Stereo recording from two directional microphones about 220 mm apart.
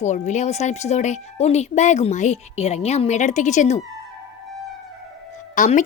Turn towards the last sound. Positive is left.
turn(degrees=35)  # may be behind; listen again after turning